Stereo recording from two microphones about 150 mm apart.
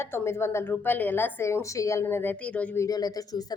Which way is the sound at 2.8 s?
25° left (ahead or behind).